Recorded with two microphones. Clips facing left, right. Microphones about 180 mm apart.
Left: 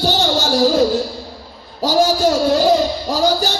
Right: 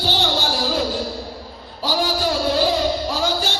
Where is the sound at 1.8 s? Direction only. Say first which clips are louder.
Left 7 dB; 45° left (ahead or behind).